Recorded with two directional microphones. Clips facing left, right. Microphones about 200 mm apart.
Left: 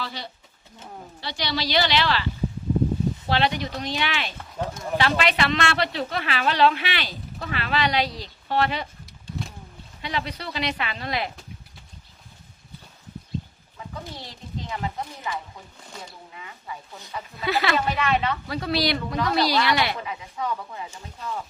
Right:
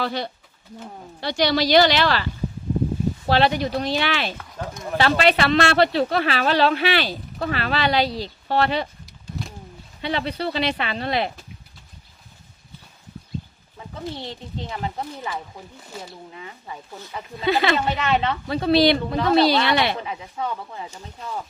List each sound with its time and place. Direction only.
0.0 s speech: 55° right (ahead or behind)
3.2 s speech: 35° right (ahead or behind)
9.4 s a sound: centre (ahead or behind)
10.0 s speech: 30° right (ahead or behind)
14.2 s speech: 30° right (ahead or behind)
16.3 s speech: 35° right (ahead or behind)